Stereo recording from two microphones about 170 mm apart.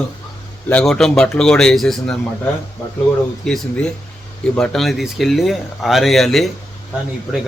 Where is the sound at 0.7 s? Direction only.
5° left (ahead or behind).